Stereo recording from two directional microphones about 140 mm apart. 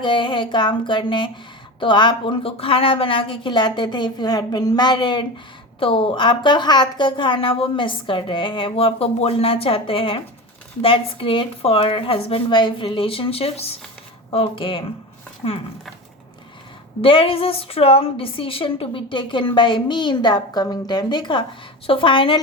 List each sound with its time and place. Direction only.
0.0 s a woman's voice: 35° left (ahead or behind)
17.0 s a woman's voice: 40° left (ahead or behind)